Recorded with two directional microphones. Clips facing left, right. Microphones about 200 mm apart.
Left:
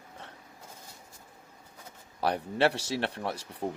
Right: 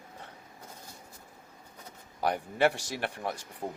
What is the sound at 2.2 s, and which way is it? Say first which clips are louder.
A man's voice: even; 30° left (ahead or behind).